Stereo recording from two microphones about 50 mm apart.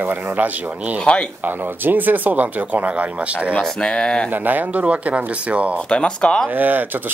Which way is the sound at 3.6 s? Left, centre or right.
Centre.